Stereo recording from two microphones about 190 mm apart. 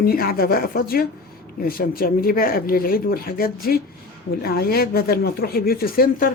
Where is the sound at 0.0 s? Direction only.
50° left (ahead or behind).